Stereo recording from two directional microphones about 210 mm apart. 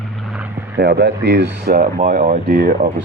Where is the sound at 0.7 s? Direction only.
50° right (ahead or behind).